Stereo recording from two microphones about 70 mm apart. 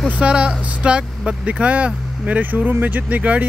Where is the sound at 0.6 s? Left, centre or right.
Centre.